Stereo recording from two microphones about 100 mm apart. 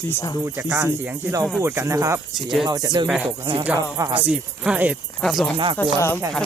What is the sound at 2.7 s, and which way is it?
Speech, 45° right (ahead or behind).